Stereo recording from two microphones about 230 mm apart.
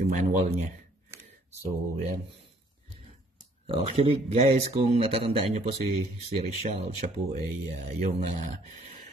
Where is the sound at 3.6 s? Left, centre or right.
Right.